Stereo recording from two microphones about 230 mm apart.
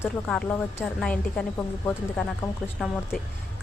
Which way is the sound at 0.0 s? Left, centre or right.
Centre.